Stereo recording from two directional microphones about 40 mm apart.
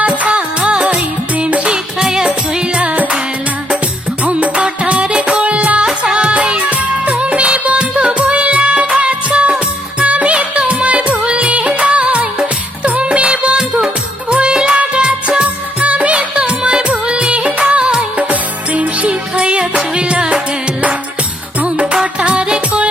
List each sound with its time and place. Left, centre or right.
0.0 s music: right
1.7 s music: centre
2.8 s music: right
4.2 s music: right
10.0 s music of bollywood: right
12.8 s music: right
14.3 s music of bollywood: right
14.5 s music: centre
14.8 s music of bollywood: right
15.4 s music: right
18.3 s music: right
21.6 s music: right